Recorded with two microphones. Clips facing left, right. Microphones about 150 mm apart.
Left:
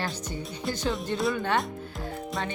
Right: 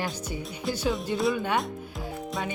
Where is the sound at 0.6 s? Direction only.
5° right (ahead or behind).